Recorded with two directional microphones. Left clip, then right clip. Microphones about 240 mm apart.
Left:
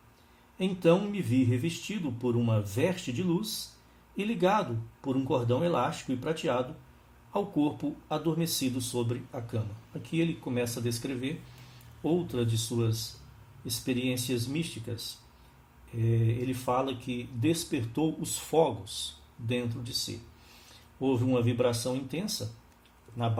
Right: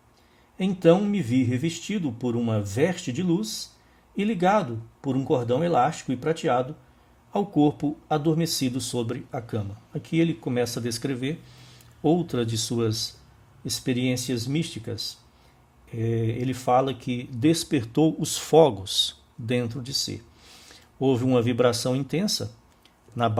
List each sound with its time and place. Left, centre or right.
0.6 s speech: right
7.3 s speech: right